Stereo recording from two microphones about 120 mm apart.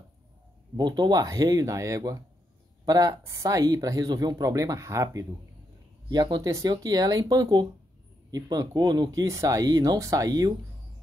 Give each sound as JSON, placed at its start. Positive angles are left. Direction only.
{"t": 0.7, "sound": "speech", "side_deg": -35}